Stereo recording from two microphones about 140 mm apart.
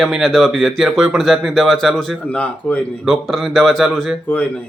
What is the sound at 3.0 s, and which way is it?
Speech, centre (ahead or behind).